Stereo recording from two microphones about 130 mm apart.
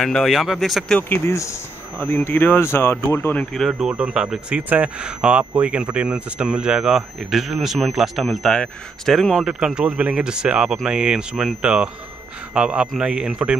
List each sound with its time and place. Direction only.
0.0 s speech: centre (ahead or behind)
0.9 s speech: 15° left (ahead or behind)
3.5 s speech: centre (ahead or behind)